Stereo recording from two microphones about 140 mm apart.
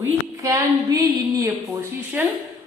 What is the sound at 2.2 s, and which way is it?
Speech, 10° right (ahead or behind).